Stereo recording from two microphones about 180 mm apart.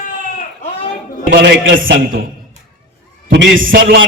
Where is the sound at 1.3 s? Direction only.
75° right (ahead or behind).